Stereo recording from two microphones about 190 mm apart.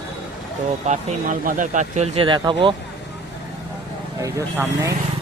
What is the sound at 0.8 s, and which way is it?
Speech, 40° right (ahead or behind).